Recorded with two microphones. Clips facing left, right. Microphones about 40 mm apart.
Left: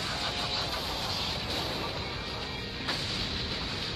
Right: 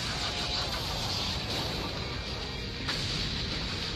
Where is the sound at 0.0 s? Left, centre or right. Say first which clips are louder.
Left 1 dB; centre.